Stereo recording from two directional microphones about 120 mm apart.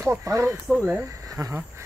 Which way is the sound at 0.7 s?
5° right (ahead or behind).